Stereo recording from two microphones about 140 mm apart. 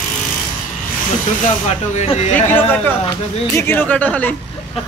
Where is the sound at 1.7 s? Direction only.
55° left (ahead or behind).